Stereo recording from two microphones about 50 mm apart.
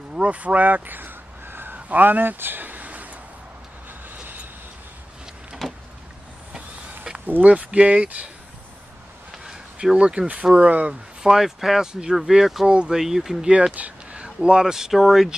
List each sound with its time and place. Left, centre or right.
0.1 s a sound: right
1.9 s speech: right
4.1 s vehicle: right
5.6 s vehicle: centre
7.2 s speech: right
9.4 s a sound: centre
9.9 s speech: centre
10.7 s speech: right
11.2 s speech: centre
11.9 s speech: centre
12.6 s speech: right
12.9 s speech: centre
13.7 s speech: right; by 15.2 s centre